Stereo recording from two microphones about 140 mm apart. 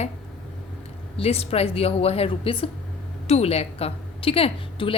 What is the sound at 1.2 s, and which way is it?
A woman's voice, 45° left (ahead or behind).